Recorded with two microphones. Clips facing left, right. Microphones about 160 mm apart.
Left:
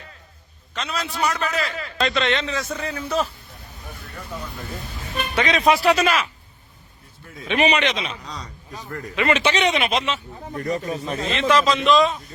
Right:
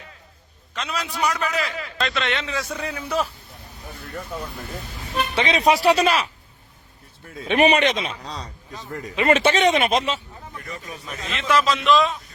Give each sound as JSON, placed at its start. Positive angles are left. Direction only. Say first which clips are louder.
{"t": 0.7, "sound": "a man's voice", "louder": "left 1 dB", "side_deg": -10}
{"t": 2.0, "sound": "a man's voice", "louder": "left 4 dB", "side_deg": 0}
{"t": 5.5, "sound": "a man's voice", "louder": "even", "side_deg": -30}
{"t": 7.4, "sound": "speech", "louder": "right 3 dB", "side_deg": -50}
{"t": 8.2, "sound": "speech", "louder": "right 2 dB", "side_deg": -30}
{"t": 9.2, "sound": "speech", "louder": "right 3 dB", "side_deg": -50}
{"t": 10.5, "sound": "a man's voice", "louder": "left 12 dB", "side_deg": 40}
{"t": 11.4, "sound": "speech", "louder": "left 1 dB", "side_deg": -5}